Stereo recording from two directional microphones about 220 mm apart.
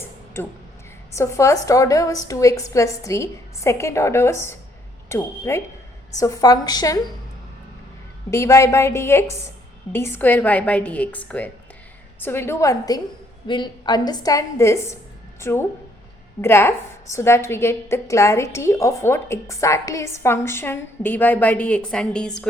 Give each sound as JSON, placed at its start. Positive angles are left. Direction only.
{"t": 1.1, "sound": "a woman's voice", "side_deg": 15}
{"t": 8.3, "sound": "a woman's voice", "side_deg": 15}